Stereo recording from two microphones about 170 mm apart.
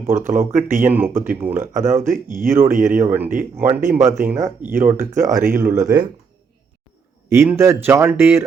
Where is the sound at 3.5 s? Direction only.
15° right (ahead or behind).